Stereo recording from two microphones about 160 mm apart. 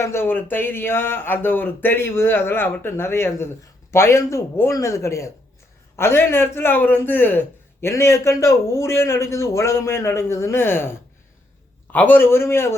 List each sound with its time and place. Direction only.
0.0 s a man's voice: 15° left (ahead or behind)